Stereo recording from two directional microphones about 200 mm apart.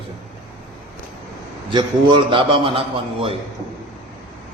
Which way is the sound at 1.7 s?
25° right (ahead or behind).